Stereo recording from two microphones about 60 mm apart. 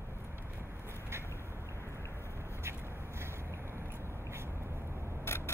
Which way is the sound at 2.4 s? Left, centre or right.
Right.